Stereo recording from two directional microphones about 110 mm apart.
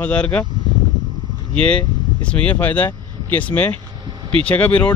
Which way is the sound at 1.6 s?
10° left (ahead or behind).